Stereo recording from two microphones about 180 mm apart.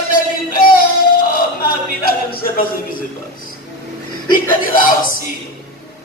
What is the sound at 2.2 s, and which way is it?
Speech, 55° left (ahead or behind).